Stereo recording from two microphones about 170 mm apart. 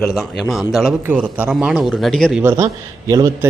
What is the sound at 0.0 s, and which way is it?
A man's voice, centre (ahead or behind).